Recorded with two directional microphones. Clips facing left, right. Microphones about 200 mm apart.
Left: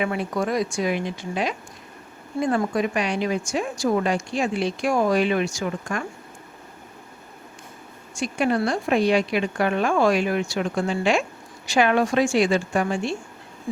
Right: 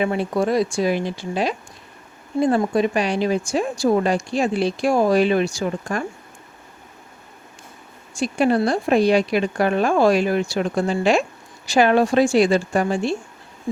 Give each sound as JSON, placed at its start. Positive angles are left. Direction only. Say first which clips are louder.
{"t": 0.0, "sound": "speech", "louder": "right 4 dB", "side_deg": -30}
{"t": 8.1, "sound": "speech", "louder": "right 4 dB", "side_deg": -35}